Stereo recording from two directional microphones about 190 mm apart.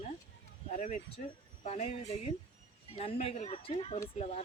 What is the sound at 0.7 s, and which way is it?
Speech, 40° left (ahead or behind).